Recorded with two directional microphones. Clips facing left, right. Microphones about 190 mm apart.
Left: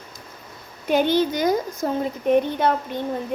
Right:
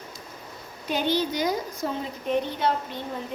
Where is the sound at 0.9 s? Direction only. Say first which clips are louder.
Left 6 dB; 55° left (ahead or behind).